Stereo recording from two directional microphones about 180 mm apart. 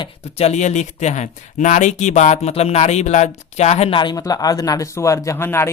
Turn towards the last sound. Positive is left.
turn(degrees=15)  # may be behind; listen again after turning